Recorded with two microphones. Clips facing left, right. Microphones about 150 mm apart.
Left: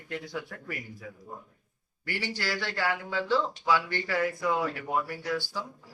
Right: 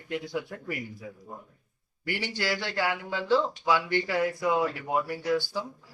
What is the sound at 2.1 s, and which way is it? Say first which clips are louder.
Speech: right 3 dB; 15° right (ahead or behind).